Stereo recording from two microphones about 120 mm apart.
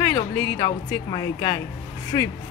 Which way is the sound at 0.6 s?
30° left (ahead or behind).